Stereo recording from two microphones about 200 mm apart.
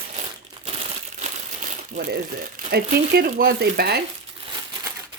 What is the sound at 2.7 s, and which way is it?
Speech, 50° right (ahead or behind).